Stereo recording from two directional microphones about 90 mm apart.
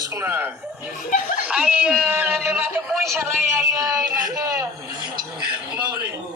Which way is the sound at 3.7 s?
40° right (ahead or behind).